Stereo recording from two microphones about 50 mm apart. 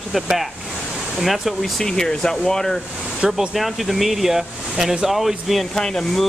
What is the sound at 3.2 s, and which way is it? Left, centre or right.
Speech, centre.